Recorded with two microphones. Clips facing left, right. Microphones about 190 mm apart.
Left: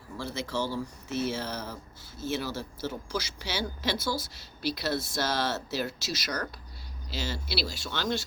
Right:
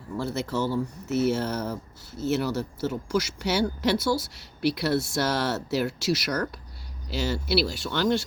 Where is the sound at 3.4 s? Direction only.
65° right (ahead or behind).